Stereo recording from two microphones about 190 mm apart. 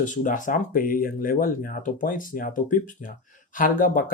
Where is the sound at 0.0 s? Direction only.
40° left (ahead or behind).